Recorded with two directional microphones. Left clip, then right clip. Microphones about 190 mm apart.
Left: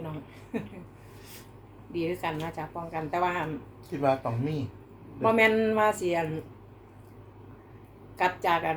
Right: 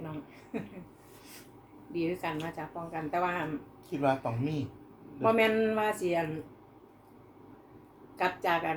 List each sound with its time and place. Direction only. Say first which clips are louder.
0.5 s speech: left 3 dB; 15° left (ahead or behind)
1.9 s speech: left 2 dB; 20° left (ahead or behind)
4.0 s speech: left 3 dB; 5° right (ahead or behind)
5.2 s a woman's voice: left 3 dB; 15° left (ahead or behind)
8.2 s a woman's voice: left 4 dB; 15° left (ahead or behind)